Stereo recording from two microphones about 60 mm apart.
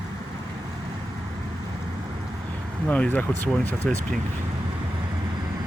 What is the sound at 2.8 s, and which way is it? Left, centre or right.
Speech, left.